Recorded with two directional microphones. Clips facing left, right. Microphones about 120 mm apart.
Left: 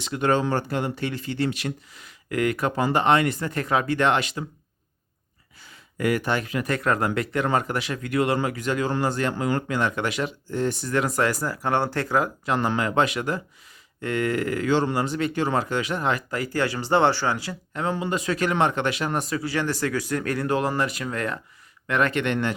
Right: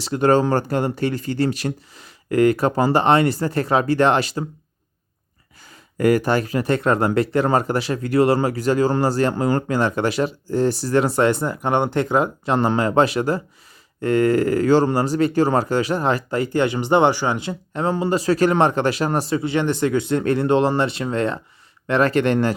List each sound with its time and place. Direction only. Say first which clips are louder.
0.0 s speech: right 6 dB; 35° right (ahead or behind)
5.6 s speech: right 7 dB; 40° right (ahead or behind)